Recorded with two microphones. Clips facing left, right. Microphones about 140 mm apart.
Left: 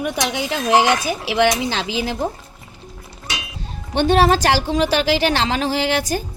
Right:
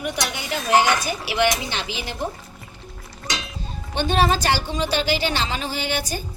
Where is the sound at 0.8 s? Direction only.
90° left.